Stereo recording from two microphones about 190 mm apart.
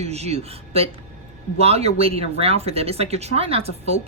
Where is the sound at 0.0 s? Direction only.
35° right (ahead or behind).